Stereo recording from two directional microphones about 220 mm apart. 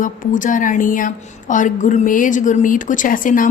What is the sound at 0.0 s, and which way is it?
A woman's voice, 35° left (ahead or behind).